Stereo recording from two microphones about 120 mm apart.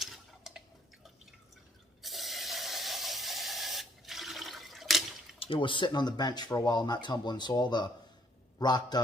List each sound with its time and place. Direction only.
0.0 s drip: centre (ahead or behind)
2.0 s spray: centre (ahead or behind)
5.4 s a man's voice: 45° left (ahead or behind)